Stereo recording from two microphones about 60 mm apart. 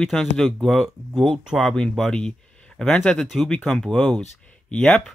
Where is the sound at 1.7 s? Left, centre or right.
Centre.